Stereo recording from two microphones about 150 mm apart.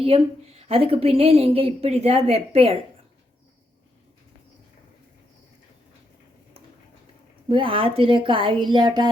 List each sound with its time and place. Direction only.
0.0 s a woman's voice: 40° right (ahead or behind)
7.4 s a woman's voice: 35° right (ahead or behind)